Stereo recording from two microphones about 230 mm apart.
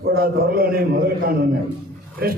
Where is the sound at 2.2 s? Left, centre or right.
Right.